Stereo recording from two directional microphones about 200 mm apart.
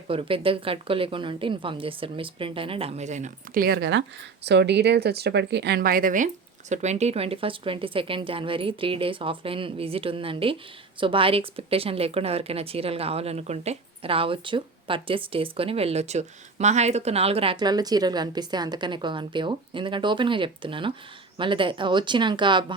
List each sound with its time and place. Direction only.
0.1 s speech: 25° right (ahead or behind)